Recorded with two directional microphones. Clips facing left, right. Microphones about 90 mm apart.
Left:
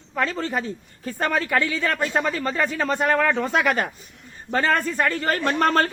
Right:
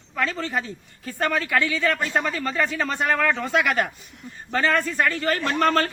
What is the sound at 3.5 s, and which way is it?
Speech, 35° left (ahead or behind).